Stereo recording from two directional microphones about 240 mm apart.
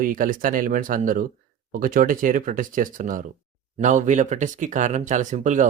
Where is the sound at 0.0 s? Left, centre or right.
Right.